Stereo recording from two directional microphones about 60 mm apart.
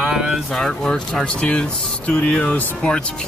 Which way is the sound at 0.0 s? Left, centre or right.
Centre.